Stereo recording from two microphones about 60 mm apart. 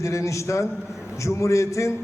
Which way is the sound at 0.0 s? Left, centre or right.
Left.